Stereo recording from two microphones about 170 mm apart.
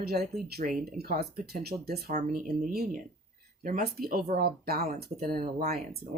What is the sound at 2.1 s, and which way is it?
Speech, 55° right (ahead or behind).